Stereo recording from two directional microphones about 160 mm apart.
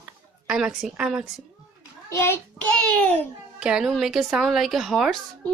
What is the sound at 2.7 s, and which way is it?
Speech, 5° left (ahead or behind).